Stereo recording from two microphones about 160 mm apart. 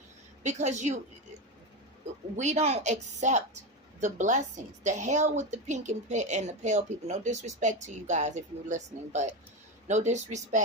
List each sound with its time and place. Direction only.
0.4 s a woman's voice: 45° right (ahead or behind)
2.3 s a woman's voice: 45° right (ahead or behind)